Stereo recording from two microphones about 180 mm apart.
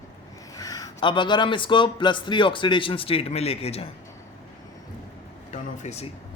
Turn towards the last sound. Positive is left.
turn(degrees=35)  # may be behind; listen again after turning